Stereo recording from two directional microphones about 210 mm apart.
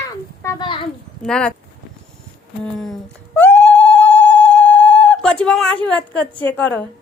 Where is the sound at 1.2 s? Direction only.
5° left (ahead or behind).